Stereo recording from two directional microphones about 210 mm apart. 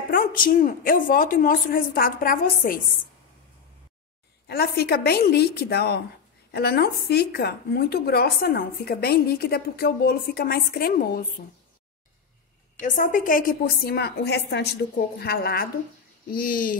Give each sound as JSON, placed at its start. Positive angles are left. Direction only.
{"t": 0.1, "sound": "a woman's voice", "side_deg": 40}
{"t": 4.5, "sound": "a woman's voice", "side_deg": 50}
{"t": 12.8, "sound": "a woman's voice", "side_deg": 40}